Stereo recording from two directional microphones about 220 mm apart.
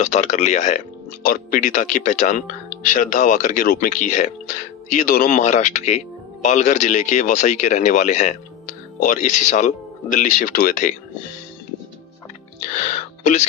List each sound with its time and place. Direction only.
0.0 s speech: 30° left (ahead or behind)